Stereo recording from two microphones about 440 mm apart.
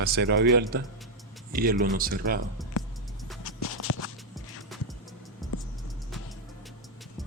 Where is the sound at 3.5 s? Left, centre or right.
Left.